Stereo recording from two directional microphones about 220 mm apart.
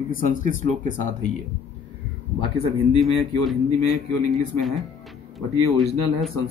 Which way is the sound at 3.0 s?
Centre (ahead or behind).